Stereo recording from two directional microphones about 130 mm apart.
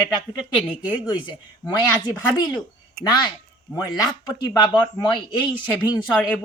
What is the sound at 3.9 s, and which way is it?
Speech, 30° left (ahead or behind).